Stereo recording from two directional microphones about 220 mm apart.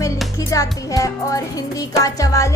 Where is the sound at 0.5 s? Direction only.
15° left (ahead or behind).